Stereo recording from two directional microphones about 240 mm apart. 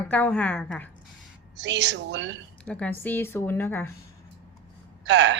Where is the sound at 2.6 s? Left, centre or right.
Centre.